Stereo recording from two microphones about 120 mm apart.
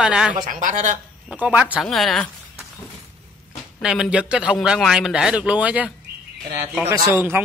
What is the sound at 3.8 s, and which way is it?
Speech, 5° right (ahead or behind).